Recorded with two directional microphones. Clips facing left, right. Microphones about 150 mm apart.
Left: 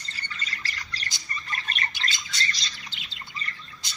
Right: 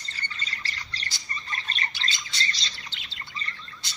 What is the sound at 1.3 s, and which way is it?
Bird, 25° right (ahead or behind).